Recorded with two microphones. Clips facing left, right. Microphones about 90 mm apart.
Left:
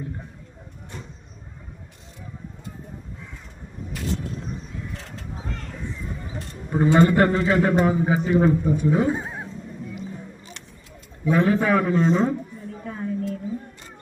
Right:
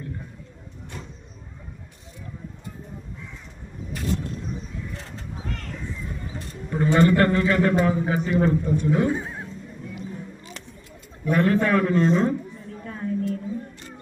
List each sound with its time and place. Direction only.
6.7 s a man's voice: 20° left (ahead or behind)
11.3 s a man's voice: 10° left (ahead or behind)
12.8 s a sound: 5° left (ahead or behind)